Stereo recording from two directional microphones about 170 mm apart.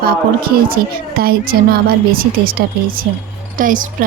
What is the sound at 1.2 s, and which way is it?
A woman's voice, 60° right (ahead or behind).